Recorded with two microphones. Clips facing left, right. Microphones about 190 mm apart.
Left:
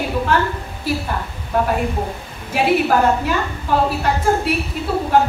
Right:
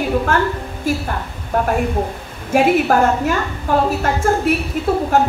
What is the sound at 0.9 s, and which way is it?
Speech, 45° right (ahead or behind).